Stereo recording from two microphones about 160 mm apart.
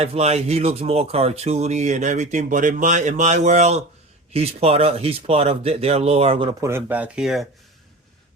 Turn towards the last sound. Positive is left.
turn(degrees=0)  # may be behind; listen again after turning